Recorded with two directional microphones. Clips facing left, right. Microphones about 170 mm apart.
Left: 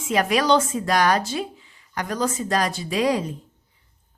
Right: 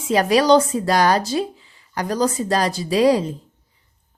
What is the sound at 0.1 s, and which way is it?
Speech, 35° right (ahead or behind).